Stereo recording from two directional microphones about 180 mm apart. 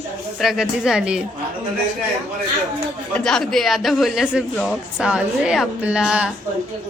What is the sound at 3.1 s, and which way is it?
Speech, 5° left (ahead or behind).